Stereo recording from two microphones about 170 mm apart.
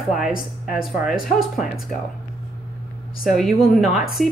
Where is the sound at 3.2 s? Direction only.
Centre (ahead or behind).